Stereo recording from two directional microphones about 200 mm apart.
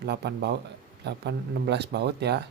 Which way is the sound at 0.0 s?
55° right (ahead or behind).